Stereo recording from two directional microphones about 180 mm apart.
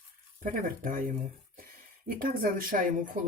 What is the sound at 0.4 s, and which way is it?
Speech, 50° right (ahead or behind).